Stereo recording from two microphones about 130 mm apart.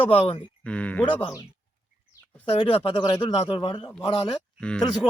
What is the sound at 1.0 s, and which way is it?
Speech, 45° left (ahead or behind).